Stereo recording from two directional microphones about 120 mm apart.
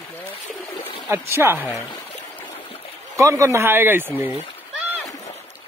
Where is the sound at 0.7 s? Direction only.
50° left (ahead or behind).